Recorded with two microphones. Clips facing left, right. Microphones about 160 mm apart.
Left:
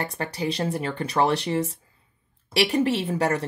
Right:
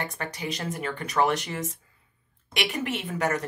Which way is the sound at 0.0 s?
35° left (ahead or behind).